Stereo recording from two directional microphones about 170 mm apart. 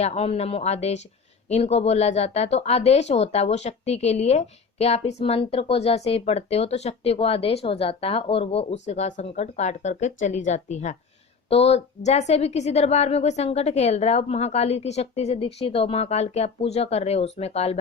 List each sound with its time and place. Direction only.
0.0 s speech: 40° left (ahead or behind)